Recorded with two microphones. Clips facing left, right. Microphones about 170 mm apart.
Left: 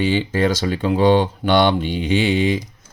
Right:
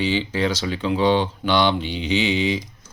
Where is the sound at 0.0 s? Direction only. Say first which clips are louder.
Left 4 dB; 50° left (ahead or behind).